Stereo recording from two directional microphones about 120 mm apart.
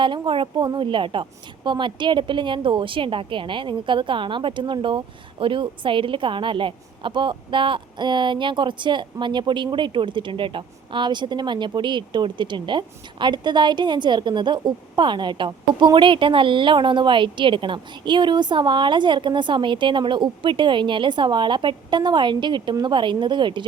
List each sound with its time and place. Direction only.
0.0 s a woman's voice: 45° right (ahead or behind)